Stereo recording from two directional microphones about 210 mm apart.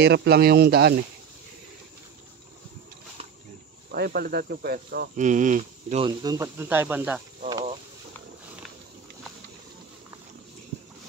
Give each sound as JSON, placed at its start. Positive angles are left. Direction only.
{"t": 0.0, "sound": "speech", "side_deg": -55}
{"t": 3.9, "sound": "speech", "side_deg": -50}